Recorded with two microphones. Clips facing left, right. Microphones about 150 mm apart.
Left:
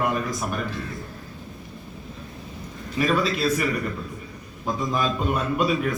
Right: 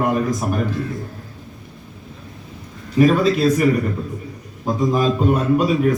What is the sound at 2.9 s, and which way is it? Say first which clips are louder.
A man's voice: right 8 dB; 45° right (ahead or behind).